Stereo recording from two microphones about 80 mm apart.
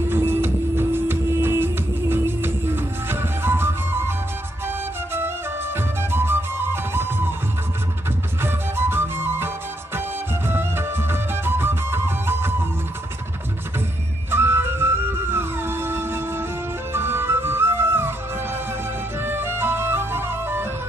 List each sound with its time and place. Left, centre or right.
0.1 s music: right
6.1 s music: right
8.4 s music: right
14.3 s music: right
19.2 s music: right